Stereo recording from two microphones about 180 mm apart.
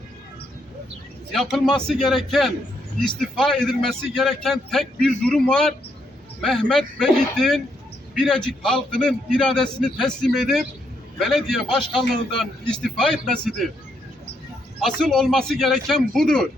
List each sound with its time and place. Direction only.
1.3 s a man's voice: centre (ahead or behind)
14.8 s a man's voice: centre (ahead or behind)